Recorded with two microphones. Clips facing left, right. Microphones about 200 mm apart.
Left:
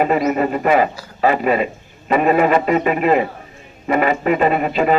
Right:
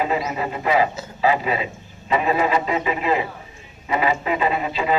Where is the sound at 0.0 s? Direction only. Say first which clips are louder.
Left 7 dB; 60° left (ahead or behind).